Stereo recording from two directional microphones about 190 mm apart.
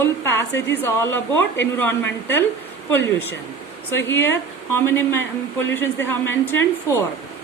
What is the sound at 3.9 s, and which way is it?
A woman's voice, 10° left (ahead or behind).